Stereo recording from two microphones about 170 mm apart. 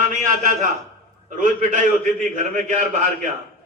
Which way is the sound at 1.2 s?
50° right (ahead or behind).